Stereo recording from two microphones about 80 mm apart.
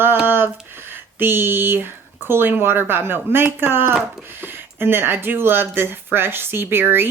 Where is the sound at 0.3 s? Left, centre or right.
Right.